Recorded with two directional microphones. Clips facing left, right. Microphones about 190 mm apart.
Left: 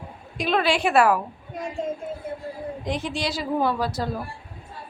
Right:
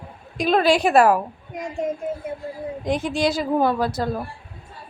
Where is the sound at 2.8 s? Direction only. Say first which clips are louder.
Right 7 dB; 50° right (ahead or behind).